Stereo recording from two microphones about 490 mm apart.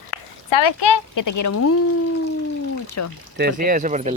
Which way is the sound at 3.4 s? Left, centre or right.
Centre.